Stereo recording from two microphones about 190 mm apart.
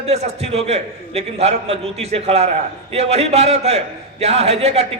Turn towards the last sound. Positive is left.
turn(degrees=-35)  # may be behind; listen again after turning